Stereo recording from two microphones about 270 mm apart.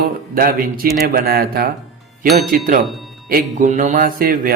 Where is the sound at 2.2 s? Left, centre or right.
Centre.